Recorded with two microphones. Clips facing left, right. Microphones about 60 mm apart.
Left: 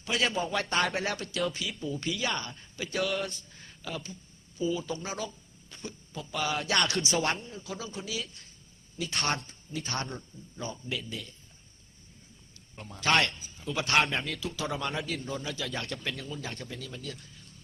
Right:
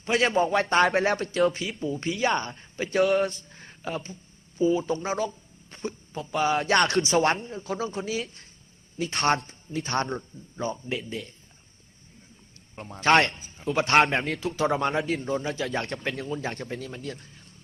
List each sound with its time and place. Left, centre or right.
0.0 s speech: right
0.9 s a man's voice: right
1.1 s a man's voice: right
3.0 s a man's voice: right
3.5 s a man's voice: right
7.3 s speech: right
12.7 s a man's voice: right